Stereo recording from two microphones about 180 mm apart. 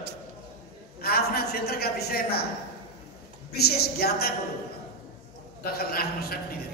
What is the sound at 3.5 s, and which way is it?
Speech, 60° left (ahead or behind).